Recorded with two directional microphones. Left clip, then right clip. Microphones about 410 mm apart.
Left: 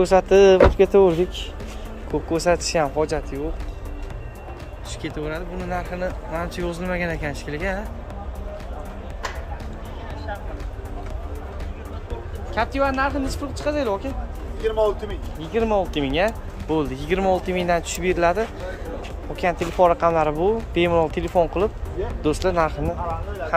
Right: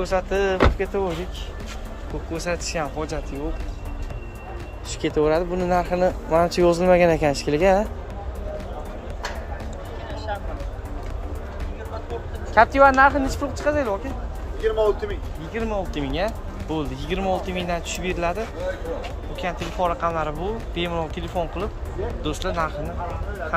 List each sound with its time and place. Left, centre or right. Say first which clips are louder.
0.0 s speech: left 8 dB; centre
2.3 s speech: left 6 dB; centre
5.0 s speech: right 10 dB; centre
12.5 s speech: right 8 dB; centre
14.6 s speech: even; left
15.5 s speech: left 6 dB; centre
19.4 s speech: left 7 dB; centre